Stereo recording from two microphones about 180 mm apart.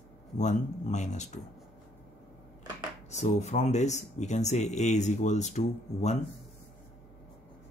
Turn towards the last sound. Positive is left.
turn(degrees=40)  # may be behind; listen again after turning